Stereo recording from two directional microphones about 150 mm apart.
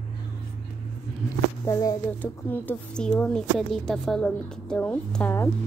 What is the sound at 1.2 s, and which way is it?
Speech, 20° left (ahead or behind).